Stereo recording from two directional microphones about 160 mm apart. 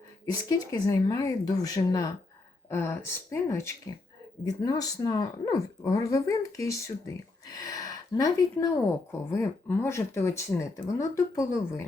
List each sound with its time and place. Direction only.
0.3 s speech: 25° left (ahead or behind)